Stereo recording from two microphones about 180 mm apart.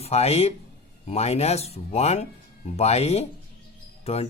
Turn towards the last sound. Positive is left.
turn(degrees=35)  # may be behind; listen again after turning